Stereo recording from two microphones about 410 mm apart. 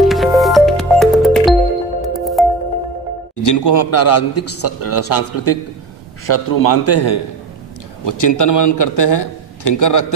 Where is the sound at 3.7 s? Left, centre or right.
Left.